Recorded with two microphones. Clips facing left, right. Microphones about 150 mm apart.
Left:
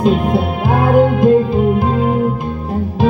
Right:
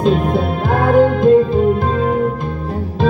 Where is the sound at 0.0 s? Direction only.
10° left (ahead or behind).